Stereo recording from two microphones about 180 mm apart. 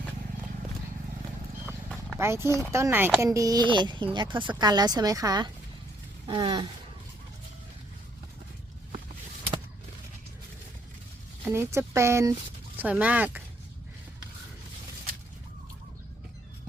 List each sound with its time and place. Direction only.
2.1 s a woman's voice: 15° right (ahead or behind)
11.4 s speech: 15° right (ahead or behind)